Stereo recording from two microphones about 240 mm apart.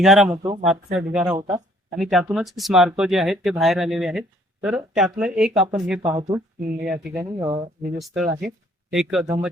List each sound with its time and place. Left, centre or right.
0.0 s speech: centre
0.3 s speech: right
0.6 s speech: centre
2.0 s speech: centre
4.6 s speech: centre
6.6 s speech: right
6.9 s speech: centre
7.3 s speech: centre
7.9 s speech: centre